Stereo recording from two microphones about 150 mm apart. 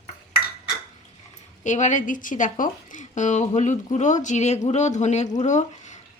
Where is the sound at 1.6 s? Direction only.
55° left (ahead or behind).